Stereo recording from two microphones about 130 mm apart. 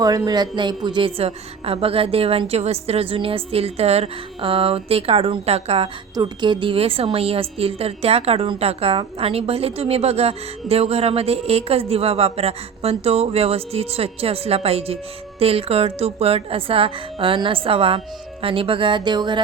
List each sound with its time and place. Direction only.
0.3 s a woman's voice: 35° right (ahead or behind); by 5.9 s 50° right (ahead or behind)
6.1 s a woman's voice: 35° right (ahead or behind)